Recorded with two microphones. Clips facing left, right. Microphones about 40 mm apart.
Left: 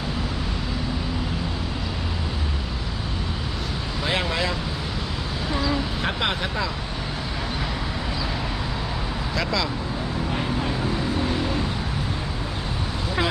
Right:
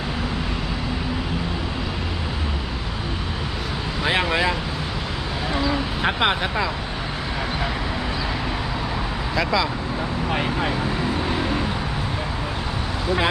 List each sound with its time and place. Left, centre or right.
4.0 s vehicle: right
6.0 s speech: right
9.3 s speech: centre